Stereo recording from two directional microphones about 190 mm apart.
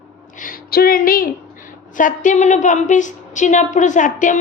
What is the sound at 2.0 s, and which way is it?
A woman's voice, 40° left (ahead or behind).